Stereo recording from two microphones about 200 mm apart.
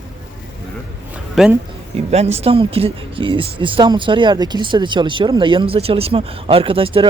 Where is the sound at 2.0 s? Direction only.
30° right (ahead or behind).